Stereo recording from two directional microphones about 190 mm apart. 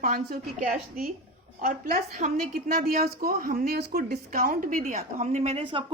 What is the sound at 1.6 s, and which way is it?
Speech, 40° right (ahead or behind).